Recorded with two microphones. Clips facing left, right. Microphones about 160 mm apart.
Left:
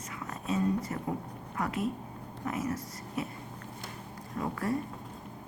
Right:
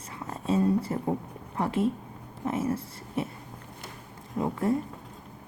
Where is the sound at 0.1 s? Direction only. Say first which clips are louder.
Right 6 dB; 30° right (ahead or behind).